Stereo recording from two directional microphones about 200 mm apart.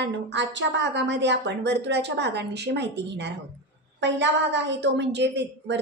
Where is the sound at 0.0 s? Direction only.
60° right (ahead or behind).